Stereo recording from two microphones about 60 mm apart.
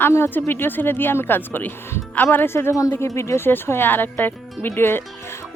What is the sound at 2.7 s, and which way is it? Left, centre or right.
Speech, left.